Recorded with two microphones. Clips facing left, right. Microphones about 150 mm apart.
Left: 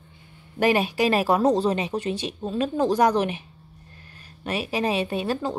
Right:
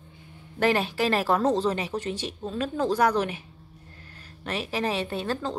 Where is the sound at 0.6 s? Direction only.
15° left (ahead or behind).